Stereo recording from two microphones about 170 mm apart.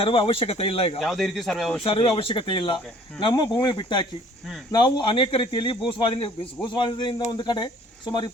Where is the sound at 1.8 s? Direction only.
30° left (ahead or behind).